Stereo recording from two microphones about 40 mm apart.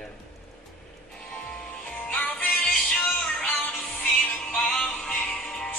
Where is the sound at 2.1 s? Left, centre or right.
Left.